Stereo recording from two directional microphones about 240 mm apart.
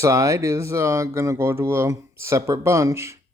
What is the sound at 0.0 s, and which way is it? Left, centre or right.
Speech, centre.